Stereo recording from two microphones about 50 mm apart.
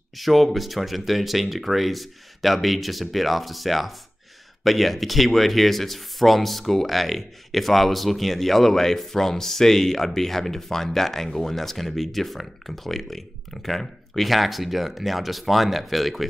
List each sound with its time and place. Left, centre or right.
0.2 s speech: centre